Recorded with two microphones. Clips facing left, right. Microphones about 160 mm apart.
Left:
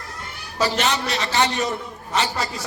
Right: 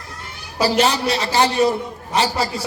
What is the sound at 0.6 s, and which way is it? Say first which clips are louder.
A man's voice: right 5 dB; 35° right (ahead or behind).